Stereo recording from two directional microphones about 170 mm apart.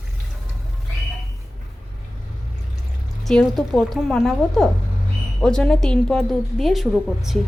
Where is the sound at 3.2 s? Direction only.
Centre (ahead or behind).